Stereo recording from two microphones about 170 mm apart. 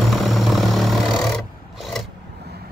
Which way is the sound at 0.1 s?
Centre (ahead or behind).